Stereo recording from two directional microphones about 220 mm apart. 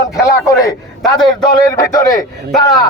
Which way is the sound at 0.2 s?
15° left (ahead or behind).